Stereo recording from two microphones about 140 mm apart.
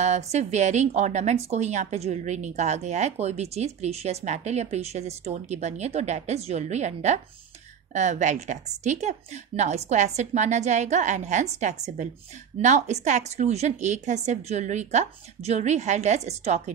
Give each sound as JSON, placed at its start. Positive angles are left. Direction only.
{"t": 0.0, "sound": "speech", "side_deg": -55}